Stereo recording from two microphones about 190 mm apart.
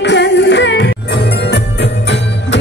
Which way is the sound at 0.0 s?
65° left (ahead or behind).